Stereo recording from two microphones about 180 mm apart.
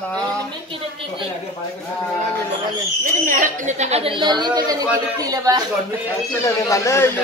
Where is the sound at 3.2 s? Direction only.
45° right (ahead or behind); by 5.6 s 20° right (ahead or behind).